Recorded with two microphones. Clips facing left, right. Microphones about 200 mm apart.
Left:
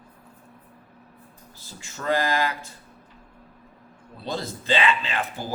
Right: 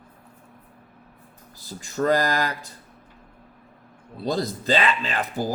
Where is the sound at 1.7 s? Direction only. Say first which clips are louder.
Right 5 dB; 40° right (ahead or behind).